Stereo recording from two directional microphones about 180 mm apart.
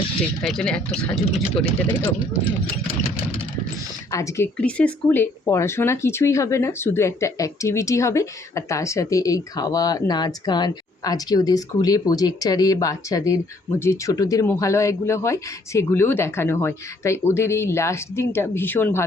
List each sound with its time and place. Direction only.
0.4 s speech: 5° left (ahead or behind)
4.1 s speech: 15° left (ahead or behind)